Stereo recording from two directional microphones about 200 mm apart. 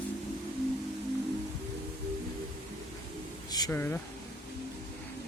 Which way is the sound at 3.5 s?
20° left (ahead or behind).